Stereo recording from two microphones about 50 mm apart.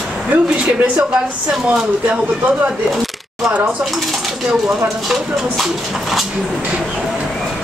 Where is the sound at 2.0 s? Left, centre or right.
Right.